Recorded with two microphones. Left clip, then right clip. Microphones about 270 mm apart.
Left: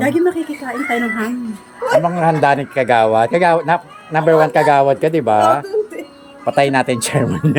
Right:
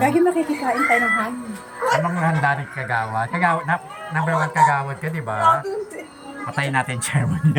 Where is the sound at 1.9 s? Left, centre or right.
Left.